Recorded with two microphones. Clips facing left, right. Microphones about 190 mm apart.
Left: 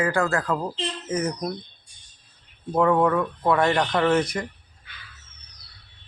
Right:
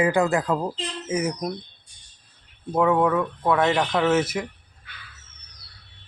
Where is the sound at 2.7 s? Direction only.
5° right (ahead or behind).